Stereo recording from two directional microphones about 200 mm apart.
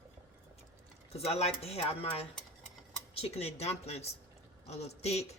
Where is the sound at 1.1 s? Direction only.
30° left (ahead or behind).